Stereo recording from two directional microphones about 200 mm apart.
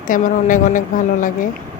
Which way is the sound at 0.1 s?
40° left (ahead or behind).